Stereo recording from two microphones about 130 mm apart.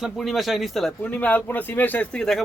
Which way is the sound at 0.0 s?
Centre (ahead or behind).